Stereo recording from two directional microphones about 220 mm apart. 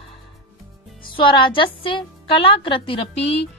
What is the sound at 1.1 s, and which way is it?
A woman's voice, 20° left (ahead or behind).